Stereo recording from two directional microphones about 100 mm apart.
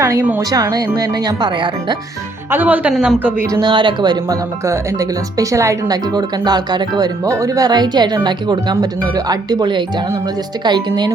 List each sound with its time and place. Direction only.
0.0 s speech: 30° right (ahead or behind); by 2.0 s 50° right (ahead or behind)
2.5 s speech: 20° right (ahead or behind)
2.9 s a woman's voice: centre (ahead or behind)
3.5 s speech: 50° right (ahead or behind)
4.6 s speech: 30° right (ahead or behind)
6.1 s speech: 45° right (ahead or behind)
7.3 s speech: 35° right (ahead or behind)